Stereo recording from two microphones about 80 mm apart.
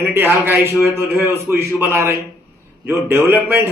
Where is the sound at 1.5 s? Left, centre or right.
Right.